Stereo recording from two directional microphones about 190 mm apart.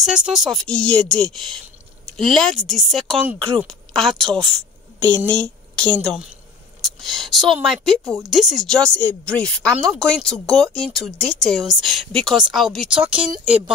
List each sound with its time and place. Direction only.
0.0 s a woman's voice: 5° right (ahead or behind)